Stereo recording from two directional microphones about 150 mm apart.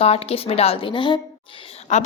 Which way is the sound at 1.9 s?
55° left (ahead or behind).